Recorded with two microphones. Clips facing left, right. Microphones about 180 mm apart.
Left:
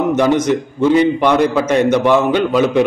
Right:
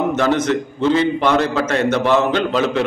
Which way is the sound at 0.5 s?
15° left (ahead or behind).